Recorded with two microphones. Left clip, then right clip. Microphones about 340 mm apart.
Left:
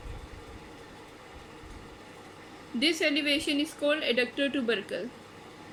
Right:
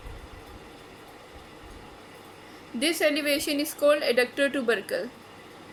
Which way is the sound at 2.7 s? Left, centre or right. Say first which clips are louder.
Right 2 dB; centre.